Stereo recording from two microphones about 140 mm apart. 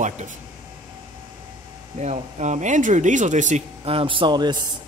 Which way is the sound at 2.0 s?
55° right (ahead or behind).